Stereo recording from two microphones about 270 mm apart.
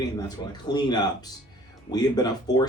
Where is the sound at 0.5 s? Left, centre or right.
Centre.